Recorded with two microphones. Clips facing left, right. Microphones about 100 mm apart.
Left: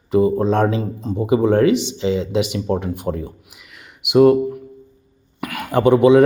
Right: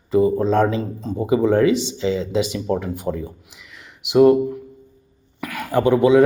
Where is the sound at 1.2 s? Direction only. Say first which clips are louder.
Left 1 dB; 20° left (ahead or behind).